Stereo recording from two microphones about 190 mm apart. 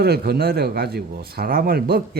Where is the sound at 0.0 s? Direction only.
55° right (ahead or behind).